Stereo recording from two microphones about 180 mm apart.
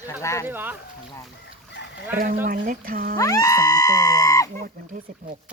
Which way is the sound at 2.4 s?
50° right (ahead or behind).